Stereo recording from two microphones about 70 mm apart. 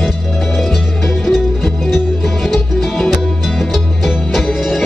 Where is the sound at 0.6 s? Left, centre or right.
Centre.